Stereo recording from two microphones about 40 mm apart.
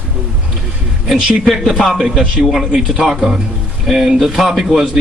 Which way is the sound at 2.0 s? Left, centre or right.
Centre.